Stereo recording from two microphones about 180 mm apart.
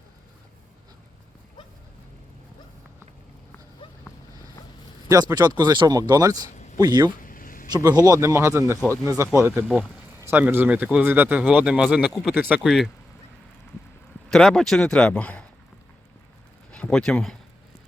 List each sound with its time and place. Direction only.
5.0 s speech: 20° right (ahead or behind)
7.2 s a sound: 50° left (ahead or behind)
7.7 s speech: 20° right (ahead or behind)
9.6 s speech: 5° left (ahead or behind)
10.2 s speech: 10° right (ahead or behind)
14.3 s speech: centre (ahead or behind)
16.7 s speech: 5° left (ahead or behind)